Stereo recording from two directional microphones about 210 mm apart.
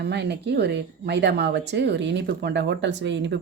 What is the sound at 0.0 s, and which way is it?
Speech, 55° right (ahead or behind).